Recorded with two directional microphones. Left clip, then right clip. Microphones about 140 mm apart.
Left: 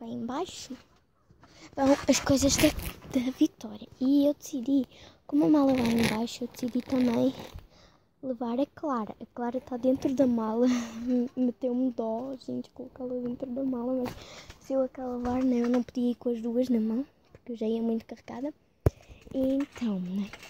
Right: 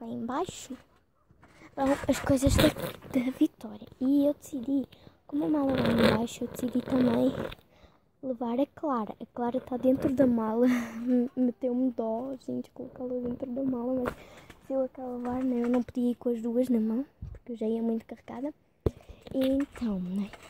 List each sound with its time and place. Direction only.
0.0 s speech: 5° right (ahead or behind)
1.8 s speech: 20° left (ahead or behind)
2.2 s speech: 5° left (ahead or behind)
5.2 s a child's voice: 30° left (ahead or behind)
6.1 s speech: 5° right (ahead or behind)
8.3 s speech: 5° right (ahead or behind); by 15.7 s 15° left (ahead or behind)
15.7 s speech: 5° right (ahead or behind)
19.5 s speech: 5° right (ahead or behind)